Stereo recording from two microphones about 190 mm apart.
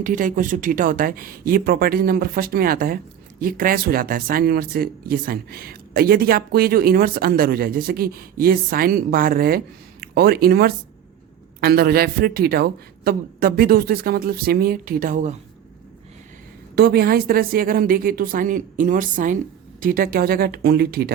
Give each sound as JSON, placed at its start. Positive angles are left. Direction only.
{"t": 0.0, "sound": "speech", "side_deg": -45}
{"t": 16.7, "sound": "speech", "side_deg": -55}